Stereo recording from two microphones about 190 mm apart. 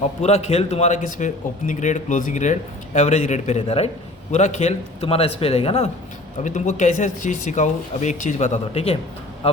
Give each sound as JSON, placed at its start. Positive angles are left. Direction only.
{"t": 0.2, "sound": "a man's voice", "side_deg": 35}